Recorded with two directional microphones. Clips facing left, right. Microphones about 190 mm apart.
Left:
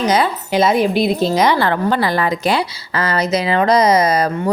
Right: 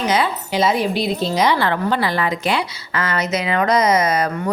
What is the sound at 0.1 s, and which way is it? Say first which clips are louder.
A woman's voice: left 3 dB; 50° left (ahead or behind).